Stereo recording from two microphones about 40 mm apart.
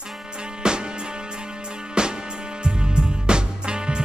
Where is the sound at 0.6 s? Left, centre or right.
Right.